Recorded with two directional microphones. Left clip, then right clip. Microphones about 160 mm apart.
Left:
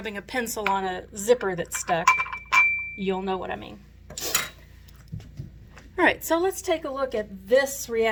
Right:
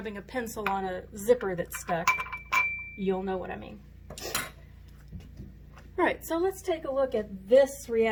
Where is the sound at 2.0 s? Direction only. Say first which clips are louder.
Left 7 dB; 20° right (ahead or behind).